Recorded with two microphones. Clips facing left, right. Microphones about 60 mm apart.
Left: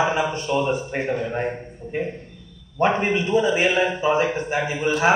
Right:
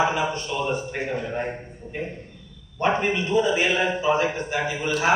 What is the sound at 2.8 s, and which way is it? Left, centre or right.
A man's voice, left.